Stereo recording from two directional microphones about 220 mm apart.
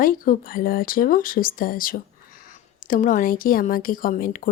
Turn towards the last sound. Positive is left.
turn(degrees=40)  # may be behind; listen again after turning